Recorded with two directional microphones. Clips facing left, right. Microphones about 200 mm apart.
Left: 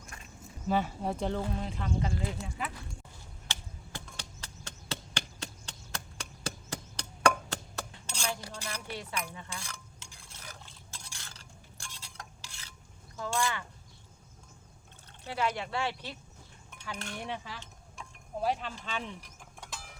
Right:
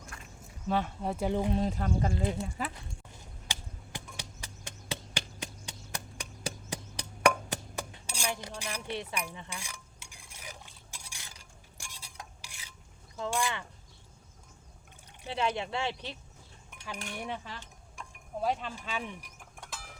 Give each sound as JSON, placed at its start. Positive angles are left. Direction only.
{"t": 0.7, "sound": "speech", "side_deg": 0}
{"t": 1.5, "sound": "speech", "side_deg": -40}
{"t": 3.1, "sound": "chop", "side_deg": -15}
{"t": 13.1, "sound": "speech", "side_deg": -20}
{"t": 15.2, "sound": "speech", "side_deg": -15}
{"t": 16.7, "sound": "cutlery", "side_deg": -10}
{"t": 17.3, "sound": "speech", "side_deg": 10}
{"t": 18.8, "sound": "speech", "side_deg": -10}
{"t": 19.5, "sound": "a sound", "side_deg": 0}